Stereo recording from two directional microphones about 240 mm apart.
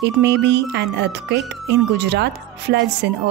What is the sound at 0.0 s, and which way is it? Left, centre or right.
A woman's voice, right.